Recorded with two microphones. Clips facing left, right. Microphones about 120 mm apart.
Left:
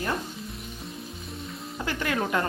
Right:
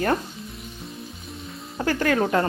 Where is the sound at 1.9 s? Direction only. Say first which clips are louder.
Right 7 dB; 40° right (ahead or behind).